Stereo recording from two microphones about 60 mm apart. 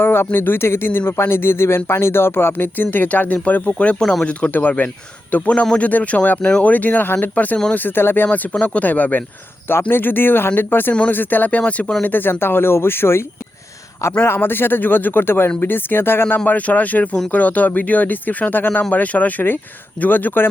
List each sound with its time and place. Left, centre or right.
0.0 s speech: left
4.0 s speech: centre
4.3 s speech: left
6.4 s speech: centre
6.7 s speech: left
12.0 s speech: left
14.3 s speech: left
16.5 s speech: left